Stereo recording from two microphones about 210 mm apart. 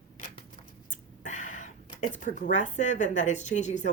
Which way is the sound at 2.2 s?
40° left (ahead or behind).